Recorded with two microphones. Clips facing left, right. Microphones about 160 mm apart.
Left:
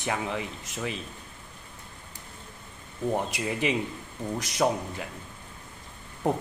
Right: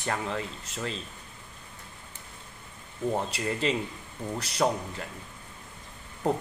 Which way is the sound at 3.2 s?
15° left (ahead or behind).